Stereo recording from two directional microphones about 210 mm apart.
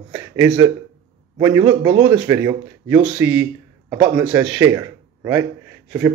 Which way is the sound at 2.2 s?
15° right (ahead or behind).